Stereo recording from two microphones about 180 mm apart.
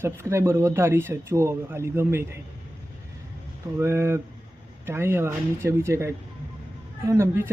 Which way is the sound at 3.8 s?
15° right (ahead or behind).